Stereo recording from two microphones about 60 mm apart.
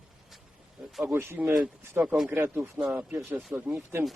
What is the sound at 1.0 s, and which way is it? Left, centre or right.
Speech, right.